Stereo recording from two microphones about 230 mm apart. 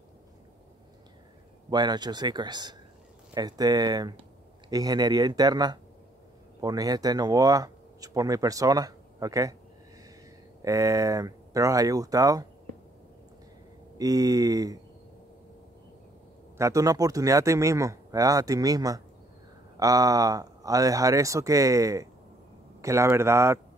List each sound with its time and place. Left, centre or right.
1.7 s speech: centre
10.6 s speech: centre
13.9 s speech: centre
16.5 s speech: centre